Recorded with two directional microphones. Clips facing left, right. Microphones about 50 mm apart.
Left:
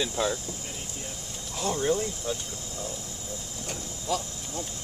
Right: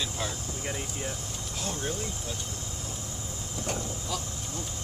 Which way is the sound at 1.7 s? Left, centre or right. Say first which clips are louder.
Left 9 dB; centre.